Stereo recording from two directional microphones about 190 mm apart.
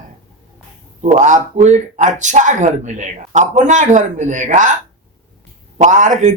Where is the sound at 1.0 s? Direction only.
40° right (ahead or behind).